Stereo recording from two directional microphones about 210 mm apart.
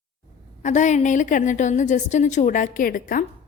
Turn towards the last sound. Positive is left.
turn(degrees=40)  # may be behind; listen again after turning